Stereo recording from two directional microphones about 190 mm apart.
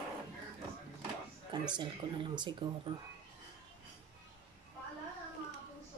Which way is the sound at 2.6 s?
25° right (ahead or behind).